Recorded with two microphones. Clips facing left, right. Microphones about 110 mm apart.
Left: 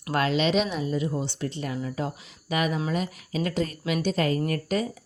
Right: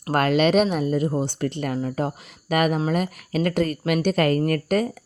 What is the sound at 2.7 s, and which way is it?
Speech, 40° right (ahead or behind).